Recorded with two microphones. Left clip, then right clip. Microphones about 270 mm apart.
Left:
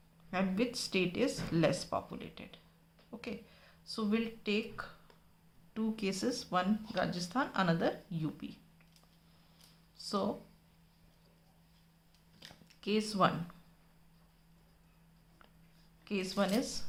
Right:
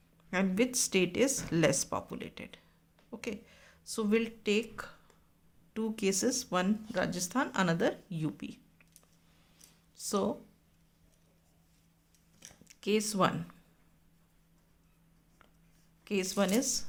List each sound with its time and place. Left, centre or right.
0.3 s speech: right
10.0 s speech: right
12.6 s speech: right
16.0 s speech: right